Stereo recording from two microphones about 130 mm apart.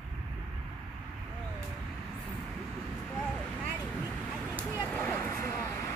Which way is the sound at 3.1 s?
5° left (ahead or behind).